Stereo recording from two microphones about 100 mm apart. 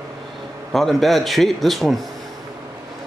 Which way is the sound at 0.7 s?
Centre (ahead or behind).